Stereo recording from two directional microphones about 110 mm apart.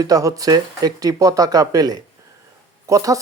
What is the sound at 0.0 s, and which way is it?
Speech, 35° right (ahead or behind).